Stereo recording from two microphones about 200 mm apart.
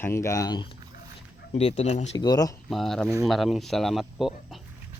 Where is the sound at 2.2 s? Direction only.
20° left (ahead or behind).